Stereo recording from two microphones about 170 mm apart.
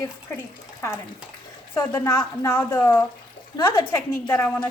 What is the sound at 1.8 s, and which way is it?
Speech, 15° left (ahead or behind).